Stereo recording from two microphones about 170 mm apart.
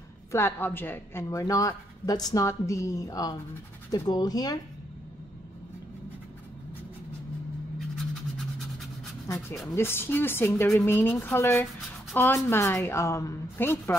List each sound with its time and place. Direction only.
0.3 s speech: 15° left (ahead or behind)
8.1 s a sound: centre (ahead or behind)
9.8 s a woman's voice: 15° left (ahead or behind)